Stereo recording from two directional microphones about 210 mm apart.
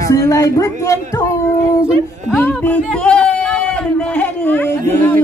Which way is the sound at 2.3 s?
10° left (ahead or behind).